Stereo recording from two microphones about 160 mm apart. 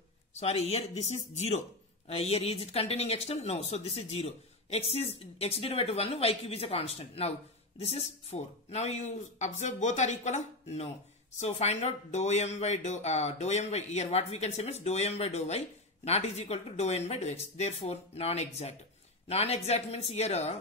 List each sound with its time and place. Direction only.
0.3 s speech: 40° left (ahead or behind)